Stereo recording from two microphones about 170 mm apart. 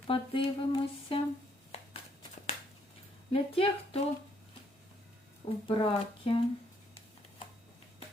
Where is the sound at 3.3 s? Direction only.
35° left (ahead or behind).